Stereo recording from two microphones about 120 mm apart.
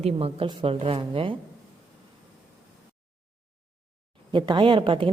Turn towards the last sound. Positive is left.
turn(degrees=-45)  # may be behind; listen again after turning